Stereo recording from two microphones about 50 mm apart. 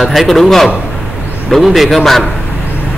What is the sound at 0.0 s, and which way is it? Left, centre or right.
A man's voice, centre.